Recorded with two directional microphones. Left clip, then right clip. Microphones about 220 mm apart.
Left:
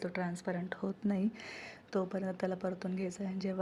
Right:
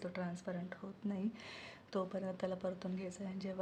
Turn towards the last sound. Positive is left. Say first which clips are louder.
# left 6 dB
turn(degrees=15)  # may be behind; listen again after turning